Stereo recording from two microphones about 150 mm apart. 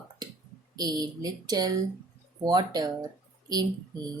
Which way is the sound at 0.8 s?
25° right (ahead or behind).